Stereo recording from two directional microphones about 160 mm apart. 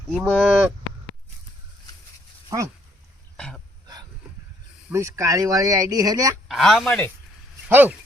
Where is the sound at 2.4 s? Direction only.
20° right (ahead or behind).